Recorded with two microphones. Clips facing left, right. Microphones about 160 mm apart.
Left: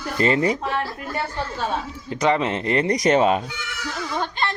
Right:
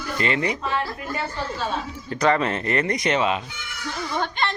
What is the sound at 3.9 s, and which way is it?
Speech, 5° left (ahead or behind).